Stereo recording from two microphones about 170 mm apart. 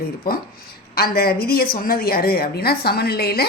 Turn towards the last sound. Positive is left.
turn(degrees=70)  # may be behind; listen again after turning